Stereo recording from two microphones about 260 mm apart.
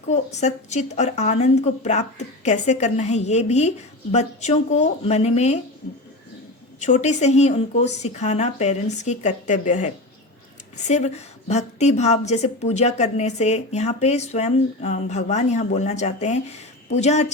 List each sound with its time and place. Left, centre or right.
0.1 s a woman's voice: left
6.7 s a woman's voice: left